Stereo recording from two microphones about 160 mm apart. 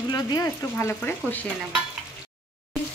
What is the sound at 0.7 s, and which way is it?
Speech, 10° left (ahead or behind).